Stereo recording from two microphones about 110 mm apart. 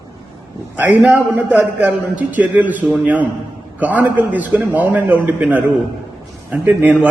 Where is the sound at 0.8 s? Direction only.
15° right (ahead or behind).